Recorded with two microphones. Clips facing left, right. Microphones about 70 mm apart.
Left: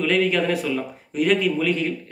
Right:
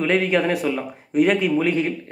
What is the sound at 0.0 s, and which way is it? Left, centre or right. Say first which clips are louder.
A man's voice: right 1 dB; right.